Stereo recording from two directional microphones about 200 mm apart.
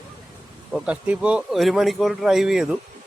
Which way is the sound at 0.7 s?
5° right (ahead or behind).